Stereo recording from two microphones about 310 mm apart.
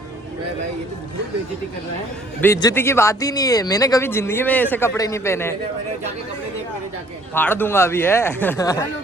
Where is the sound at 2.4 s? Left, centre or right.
Centre.